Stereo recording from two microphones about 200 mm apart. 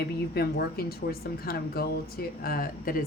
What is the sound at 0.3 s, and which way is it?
Speech, 50° left (ahead or behind).